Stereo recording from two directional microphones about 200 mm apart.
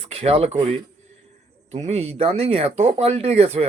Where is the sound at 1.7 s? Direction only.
35° right (ahead or behind).